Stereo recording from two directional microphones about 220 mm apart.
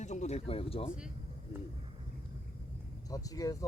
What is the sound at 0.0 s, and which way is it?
Speech, 30° left (ahead or behind).